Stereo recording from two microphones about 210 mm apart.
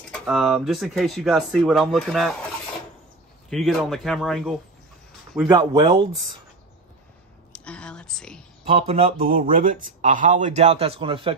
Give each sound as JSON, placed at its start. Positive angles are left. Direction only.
{"t": 0.1, "sound": "speech", "side_deg": 0}
{"t": 3.4, "sound": "speech", "side_deg": 0}
{"t": 5.5, "sound": "speech", "side_deg": -25}
{"t": 7.5, "sound": "a sound", "side_deg": 5}
{"t": 8.6, "sound": "speech", "side_deg": -25}
{"t": 9.3, "sound": "speech", "side_deg": -40}